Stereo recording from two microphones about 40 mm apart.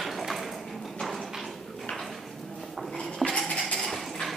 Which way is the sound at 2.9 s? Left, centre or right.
Centre.